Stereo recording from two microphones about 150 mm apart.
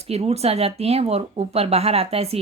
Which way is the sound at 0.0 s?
45° right (ahead or behind).